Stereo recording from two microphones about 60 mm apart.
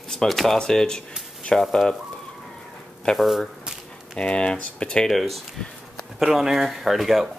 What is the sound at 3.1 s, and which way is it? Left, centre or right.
Speech, centre.